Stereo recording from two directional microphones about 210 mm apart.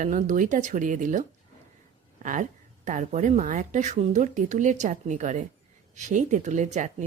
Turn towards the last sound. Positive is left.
turn(degrees=-35)  # may be behind; listen again after turning